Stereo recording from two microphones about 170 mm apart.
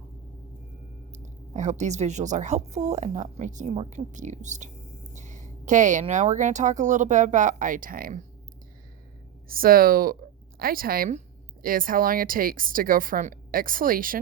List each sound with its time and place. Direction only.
1.1 s speech: 45° right (ahead or behind)
9.5 s a woman's voice: 60° right (ahead or behind)